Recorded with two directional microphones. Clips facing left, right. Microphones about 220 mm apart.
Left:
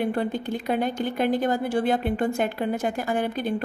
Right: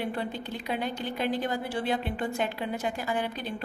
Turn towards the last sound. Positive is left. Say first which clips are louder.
# left 5 dB
turn(degrees=50)  # may be behind; listen again after turning